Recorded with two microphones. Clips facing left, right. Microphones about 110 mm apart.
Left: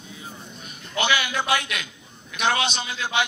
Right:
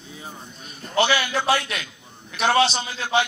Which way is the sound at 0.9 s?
35° right (ahead or behind).